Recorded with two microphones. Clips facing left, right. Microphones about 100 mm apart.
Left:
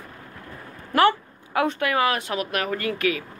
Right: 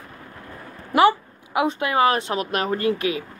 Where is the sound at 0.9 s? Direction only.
10° right (ahead or behind).